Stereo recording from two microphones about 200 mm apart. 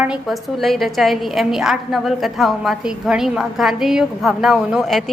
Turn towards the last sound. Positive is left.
turn(degrees=0)  # may be behind; listen again after turning